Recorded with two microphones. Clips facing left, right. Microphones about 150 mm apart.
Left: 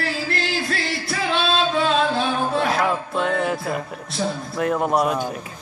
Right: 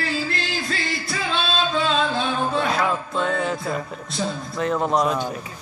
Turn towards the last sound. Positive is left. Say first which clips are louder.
# left 1 dB
turn(degrees=10)  # may be behind; listen again after turning